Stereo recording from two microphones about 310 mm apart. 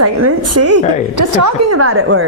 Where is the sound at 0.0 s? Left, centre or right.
Right.